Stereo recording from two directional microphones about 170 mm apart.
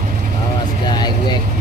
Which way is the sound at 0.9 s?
25° left (ahead or behind).